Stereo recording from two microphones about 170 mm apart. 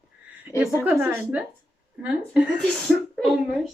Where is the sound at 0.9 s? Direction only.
10° right (ahead or behind).